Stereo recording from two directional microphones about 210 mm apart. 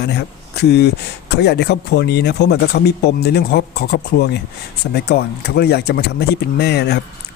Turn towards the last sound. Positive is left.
turn(degrees=50)  # may be behind; listen again after turning